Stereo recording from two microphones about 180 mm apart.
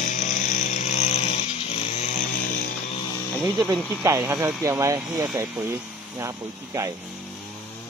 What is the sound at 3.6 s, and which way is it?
Speech, 20° right (ahead or behind).